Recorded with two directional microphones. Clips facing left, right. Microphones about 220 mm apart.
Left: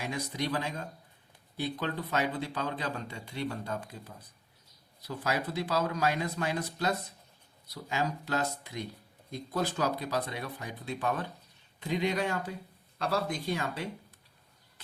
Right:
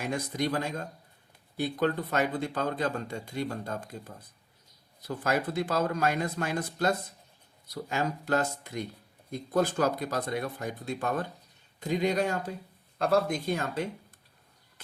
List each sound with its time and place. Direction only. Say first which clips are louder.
0.0 s speech: right 4 dB; 50° right (ahead or behind)